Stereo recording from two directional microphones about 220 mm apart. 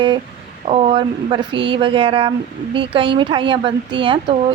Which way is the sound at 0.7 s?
25° right (ahead or behind).